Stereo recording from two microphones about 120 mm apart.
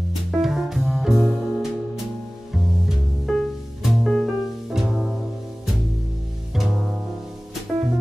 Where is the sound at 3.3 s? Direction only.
Centre (ahead or behind).